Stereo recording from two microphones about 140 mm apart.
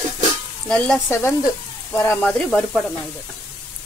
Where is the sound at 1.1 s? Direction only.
20° left (ahead or behind).